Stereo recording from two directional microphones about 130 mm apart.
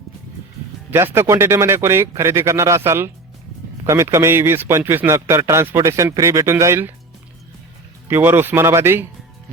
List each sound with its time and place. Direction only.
0.9 s speech: 15° right (ahead or behind)
8.0 s speech: 15° right (ahead or behind)